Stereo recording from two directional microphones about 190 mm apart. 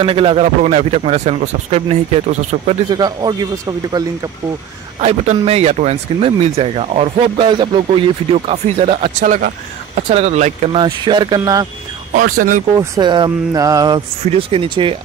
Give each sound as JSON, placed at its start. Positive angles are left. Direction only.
{"t": 0.0, "sound": "speech", "side_deg": -30}
{"t": 3.0, "sound": "speech", "side_deg": -20}
{"t": 5.0, "sound": "speech", "side_deg": -35}
{"t": 9.2, "sound": "speech", "side_deg": -45}
{"t": 12.2, "sound": "speech", "side_deg": -45}
{"t": 12.7, "sound": "speech", "side_deg": -20}
{"t": 14.2, "sound": "speech", "side_deg": -30}